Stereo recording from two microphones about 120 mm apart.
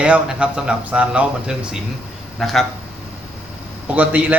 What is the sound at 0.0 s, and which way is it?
Speech, 10° right (ahead or behind).